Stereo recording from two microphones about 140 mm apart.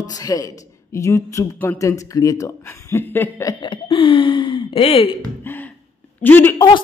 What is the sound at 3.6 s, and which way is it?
Speech, 35° left (ahead or behind).